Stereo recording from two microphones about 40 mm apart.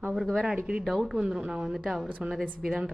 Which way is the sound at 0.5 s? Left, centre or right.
Right.